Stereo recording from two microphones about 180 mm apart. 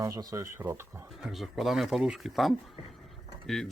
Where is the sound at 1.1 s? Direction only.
Centre (ahead or behind).